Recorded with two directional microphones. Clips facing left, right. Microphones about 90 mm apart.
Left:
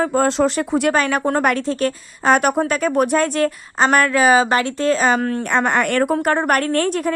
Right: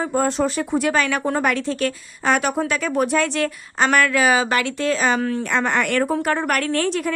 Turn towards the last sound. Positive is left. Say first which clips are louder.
# left 3 dB
turn(degrees=45)  # may be behind; listen again after turning